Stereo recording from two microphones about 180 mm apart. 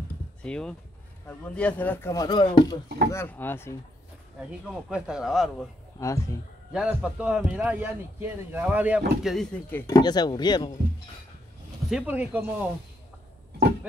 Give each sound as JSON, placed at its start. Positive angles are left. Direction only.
{"t": 0.4, "sound": "speech", "side_deg": 5}
{"t": 3.1, "sound": "speech", "side_deg": 10}
{"t": 4.4, "sound": "speech", "side_deg": -5}
{"t": 6.7, "sound": "a man's voice", "side_deg": -5}
{"t": 9.9, "sound": "speech", "side_deg": 25}
{"t": 11.9, "sound": "a man's voice", "side_deg": -10}